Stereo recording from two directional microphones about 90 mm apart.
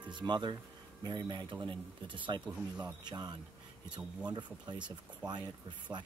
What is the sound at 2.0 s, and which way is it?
Speech, 65° right (ahead or behind).